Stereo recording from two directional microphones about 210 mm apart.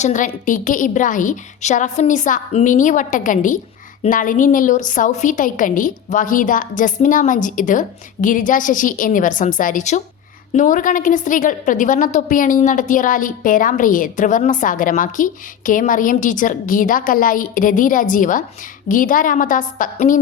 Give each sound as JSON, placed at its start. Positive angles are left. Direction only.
{"t": 0.0, "sound": "a woman's voice", "side_deg": 35}